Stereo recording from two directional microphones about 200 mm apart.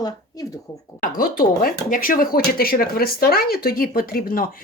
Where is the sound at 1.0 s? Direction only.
45° left (ahead or behind).